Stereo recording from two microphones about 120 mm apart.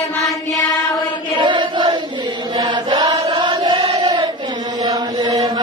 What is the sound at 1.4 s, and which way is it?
Chant, 40° right (ahead or behind).